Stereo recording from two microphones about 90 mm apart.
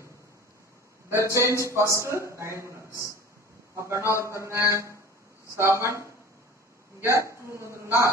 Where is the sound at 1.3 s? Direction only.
35° right (ahead or behind).